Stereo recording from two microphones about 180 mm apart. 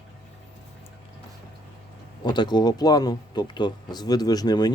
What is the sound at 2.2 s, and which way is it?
Speech, 25° left (ahead or behind).